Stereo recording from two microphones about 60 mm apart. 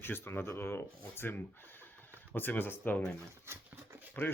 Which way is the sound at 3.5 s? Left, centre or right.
Right.